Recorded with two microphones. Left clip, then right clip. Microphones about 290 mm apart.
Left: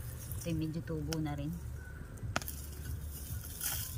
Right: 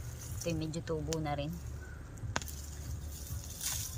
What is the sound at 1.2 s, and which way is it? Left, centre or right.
Speech, right.